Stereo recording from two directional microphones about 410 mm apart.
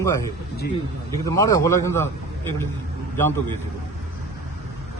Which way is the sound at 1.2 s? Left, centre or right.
Centre.